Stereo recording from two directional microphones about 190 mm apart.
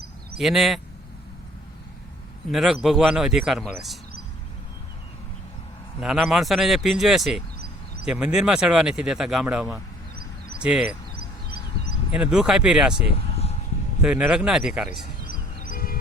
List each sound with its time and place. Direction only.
0.3 s speech: centre (ahead or behind)
2.5 s speech: centre (ahead or behind)
6.0 s speech: 5° right (ahead or behind)
12.1 s speech: 5° right (ahead or behind)
13.1 s vehicle: 35° left (ahead or behind)
14.0 s speech: 5° right (ahead or behind)
15.0 s music: 45° left (ahead or behind)